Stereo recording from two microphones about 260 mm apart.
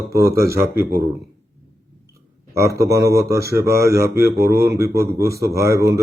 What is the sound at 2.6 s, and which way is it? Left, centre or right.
Speech, centre.